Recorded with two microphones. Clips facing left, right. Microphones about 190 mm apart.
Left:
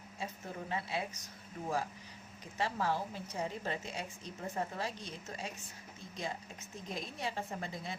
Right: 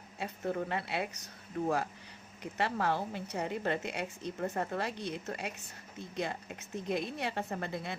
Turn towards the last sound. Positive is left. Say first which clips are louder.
# right 4 dB
turn(degrees=-65)  # may be behind; listen again after turning